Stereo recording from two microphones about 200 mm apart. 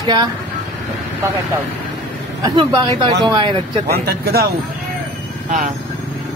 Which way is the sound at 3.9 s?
50° right (ahead or behind).